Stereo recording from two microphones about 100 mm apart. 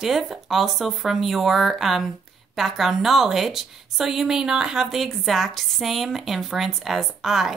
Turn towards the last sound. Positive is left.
turn(degrees=0)  # may be behind; listen again after turning